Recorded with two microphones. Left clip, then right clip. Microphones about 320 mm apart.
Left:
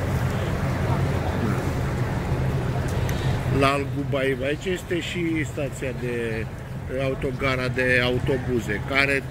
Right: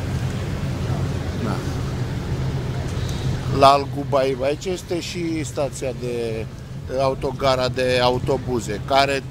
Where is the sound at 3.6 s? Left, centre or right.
Centre.